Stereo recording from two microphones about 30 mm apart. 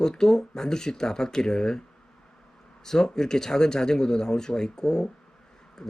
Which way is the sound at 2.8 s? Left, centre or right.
Centre.